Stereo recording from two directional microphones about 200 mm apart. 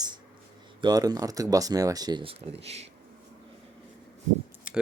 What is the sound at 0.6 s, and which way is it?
Speech, 20° right (ahead or behind).